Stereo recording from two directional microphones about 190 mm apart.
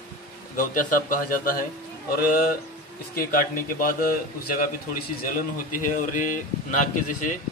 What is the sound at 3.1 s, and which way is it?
A man's voice, 50° left (ahead or behind).